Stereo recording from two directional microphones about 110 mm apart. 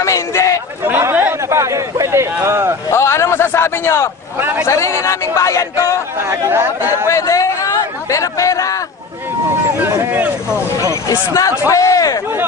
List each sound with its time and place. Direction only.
0.0 s a sound: 30° left (ahead or behind)
0.8 s chatter: 20° right (ahead or behind)
2.4 s speech: 25° right (ahead or behind)
2.9 s a man's voice: 25° left (ahead or behind)
4.4 s speech: 15° right (ahead or behind)
4.6 s speech: 25° left (ahead or behind)
6.1 s speech: 20° right (ahead or behind)
7.1 s speech: 30° left (ahead or behind)
9.8 s speech: 15° right (ahead or behind)
10.9 s speech: 30° left (ahead or behind)